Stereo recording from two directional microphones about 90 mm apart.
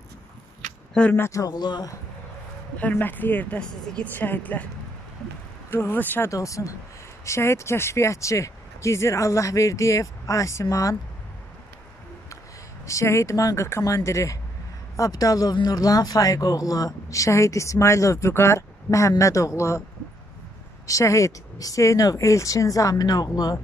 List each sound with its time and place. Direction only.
1.1 s speech: 25° left (ahead or behind)
1.4 s speech: 50° left (ahead or behind)
2.8 s speech: 20° left (ahead or behind)
5.7 s speech: 25° left (ahead or behind)
6.3 s speech: 35° left (ahead or behind)
12.8 s speech: 35° left (ahead or behind)
20.8 s speech: 35° left (ahead or behind)